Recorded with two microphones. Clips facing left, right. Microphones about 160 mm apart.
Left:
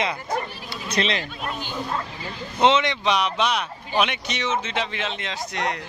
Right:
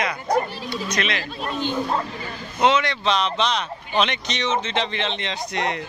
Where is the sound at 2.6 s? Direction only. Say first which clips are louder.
Even; 25° left (ahead or behind).